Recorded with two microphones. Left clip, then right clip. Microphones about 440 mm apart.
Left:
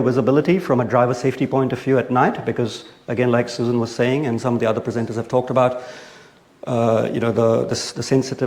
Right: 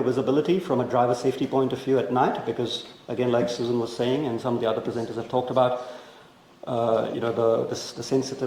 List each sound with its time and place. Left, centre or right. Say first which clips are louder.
0.2 s speech: left 6 dB; left
6.7 s speech: left 5 dB; left